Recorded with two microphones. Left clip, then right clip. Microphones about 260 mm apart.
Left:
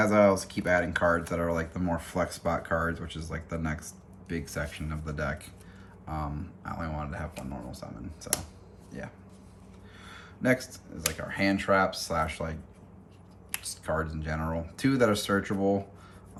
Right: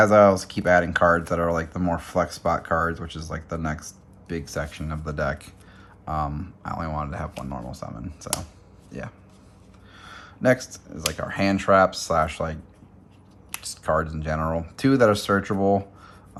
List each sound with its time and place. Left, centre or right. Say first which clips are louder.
0.0 s speech: right 7 dB; right
10.0 s speech: right 8 dB; centre
13.6 s speech: right 8 dB; right